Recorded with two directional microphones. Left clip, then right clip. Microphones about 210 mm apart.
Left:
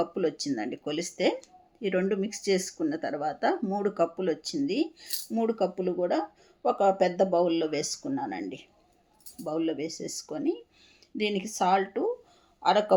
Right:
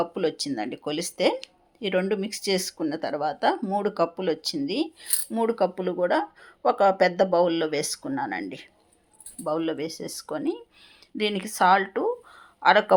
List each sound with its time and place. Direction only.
0.0 s speech: 5° right (ahead or behind)